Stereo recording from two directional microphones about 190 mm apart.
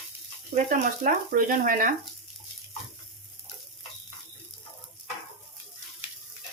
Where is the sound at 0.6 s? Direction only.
45° right (ahead or behind).